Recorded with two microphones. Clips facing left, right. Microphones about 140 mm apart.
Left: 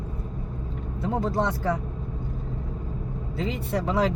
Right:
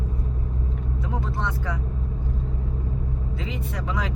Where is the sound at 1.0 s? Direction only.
40° left (ahead or behind).